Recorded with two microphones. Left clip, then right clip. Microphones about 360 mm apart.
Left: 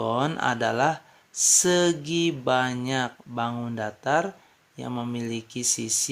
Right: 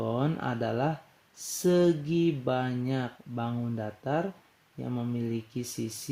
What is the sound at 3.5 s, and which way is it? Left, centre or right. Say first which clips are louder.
Speech: left 5 dB; left.